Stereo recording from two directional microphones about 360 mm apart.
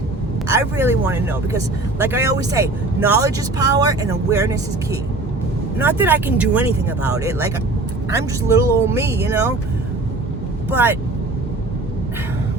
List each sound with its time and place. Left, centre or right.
0.4 s speech: centre
10.7 s speech: centre